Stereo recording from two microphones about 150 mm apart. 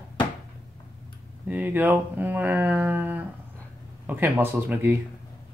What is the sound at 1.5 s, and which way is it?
Speech, 10° right (ahead or behind).